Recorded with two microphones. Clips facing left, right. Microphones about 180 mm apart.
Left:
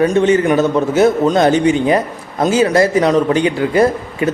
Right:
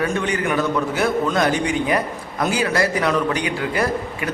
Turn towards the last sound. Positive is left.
turn(degrees=25)  # may be behind; listen again after turning